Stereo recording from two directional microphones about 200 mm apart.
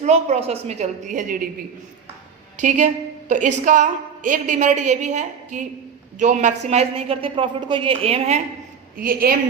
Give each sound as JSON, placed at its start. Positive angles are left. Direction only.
{"t": 0.0, "sound": "a woman's voice", "side_deg": -35}
{"t": 2.6, "sound": "a woman's voice", "side_deg": -40}
{"t": 9.0, "sound": "a woman's voice", "side_deg": -45}